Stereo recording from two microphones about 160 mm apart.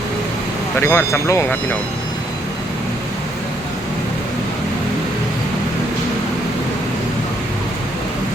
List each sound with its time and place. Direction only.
0.8 s speech: 15° left (ahead or behind)